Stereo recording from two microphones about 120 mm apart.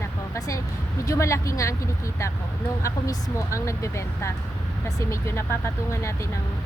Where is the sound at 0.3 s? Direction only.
30° left (ahead or behind).